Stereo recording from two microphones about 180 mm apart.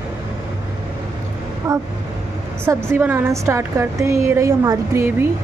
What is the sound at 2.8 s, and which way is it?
A woman's voice, 10° right (ahead or behind).